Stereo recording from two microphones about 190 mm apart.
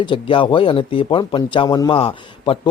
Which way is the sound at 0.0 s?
25° left (ahead or behind).